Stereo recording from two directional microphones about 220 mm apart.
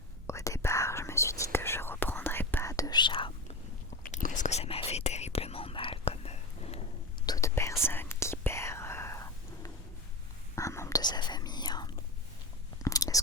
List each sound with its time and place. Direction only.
0.3 s whispering: 15° left (ahead or behind)
4.0 s whispering: 35° left (ahead or behind)
7.3 s whispering: 15° left (ahead or behind)